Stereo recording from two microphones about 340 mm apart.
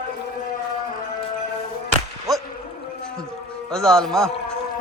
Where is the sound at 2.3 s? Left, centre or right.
Centre.